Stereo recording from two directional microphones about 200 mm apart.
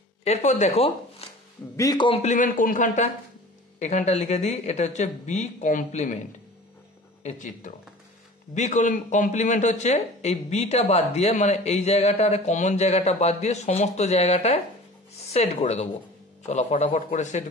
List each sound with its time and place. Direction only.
0.2 s speech: 35° left (ahead or behind)
1.2 s a sound: 30° left (ahead or behind)
1.8 s speech: 20° left (ahead or behind); by 6.1 s 40° left (ahead or behind)
7.2 s speech: 40° left (ahead or behind)